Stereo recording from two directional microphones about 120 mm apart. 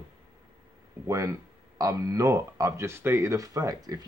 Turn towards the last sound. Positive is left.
turn(degrees=-30)  # may be behind; listen again after turning